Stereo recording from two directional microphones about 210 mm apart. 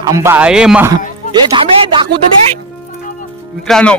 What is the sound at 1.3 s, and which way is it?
Speech, 20° right (ahead or behind).